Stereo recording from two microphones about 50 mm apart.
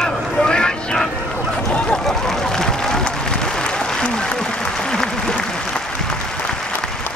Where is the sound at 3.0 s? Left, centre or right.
Centre.